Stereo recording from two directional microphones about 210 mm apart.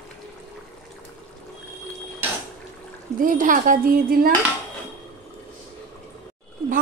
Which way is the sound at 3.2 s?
40° right (ahead or behind).